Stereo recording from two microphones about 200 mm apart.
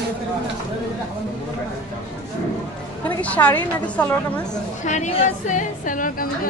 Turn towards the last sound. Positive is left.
turn(degrees=40)  # may be behind; listen again after turning